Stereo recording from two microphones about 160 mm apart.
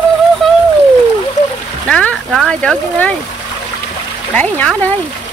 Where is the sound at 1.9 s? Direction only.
5° left (ahead or behind).